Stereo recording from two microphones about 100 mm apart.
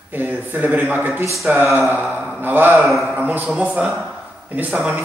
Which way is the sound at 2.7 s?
Centre (ahead or behind).